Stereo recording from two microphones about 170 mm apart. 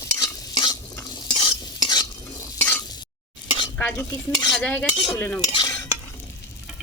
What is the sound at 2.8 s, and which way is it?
Stir, 25° left (ahead or behind).